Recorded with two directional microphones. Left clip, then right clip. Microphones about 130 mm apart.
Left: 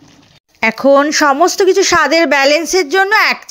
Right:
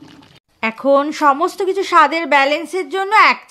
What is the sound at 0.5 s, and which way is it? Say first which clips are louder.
Speech: left 5 dB; 40° left (ahead or behind).